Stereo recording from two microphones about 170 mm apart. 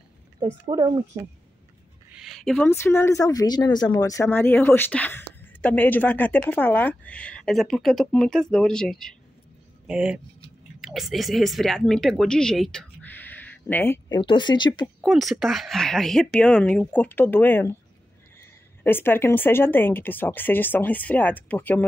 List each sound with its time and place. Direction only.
0.7 s speech: 30° right (ahead or behind)
2.1 s a sound: centre (ahead or behind)
2.7 s speech: 15° left (ahead or behind)
14.1 s speech: 25° left (ahead or behind)
15.0 s speech: centre (ahead or behind)
18.9 s speech: 10° left (ahead or behind)